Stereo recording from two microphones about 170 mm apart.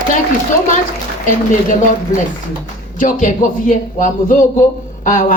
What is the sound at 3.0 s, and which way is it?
A woman's voice, 50° left (ahead or behind).